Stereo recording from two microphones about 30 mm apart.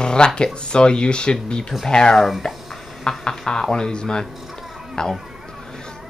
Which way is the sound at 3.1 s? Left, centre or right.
Left.